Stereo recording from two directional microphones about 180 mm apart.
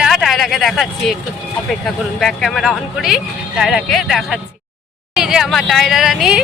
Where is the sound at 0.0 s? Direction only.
Centre (ahead or behind).